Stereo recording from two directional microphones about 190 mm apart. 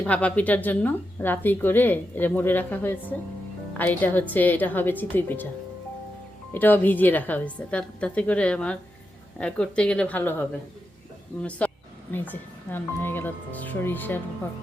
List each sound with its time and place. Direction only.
0.0 s a woman's voice: 5° left (ahead or behind)
6.5 s a woman's voice: 10° left (ahead or behind)
11.6 s a sound: 5° left (ahead or behind)
12.1 s a woman's voice: 10° left (ahead or behind)